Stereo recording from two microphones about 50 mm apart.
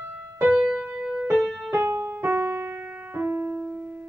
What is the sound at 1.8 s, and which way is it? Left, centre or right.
Music, right.